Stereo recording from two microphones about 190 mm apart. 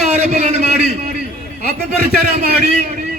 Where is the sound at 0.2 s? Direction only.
35° right (ahead or behind).